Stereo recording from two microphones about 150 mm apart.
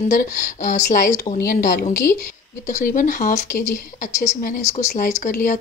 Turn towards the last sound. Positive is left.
turn(degrees=60)  # may be behind; listen again after turning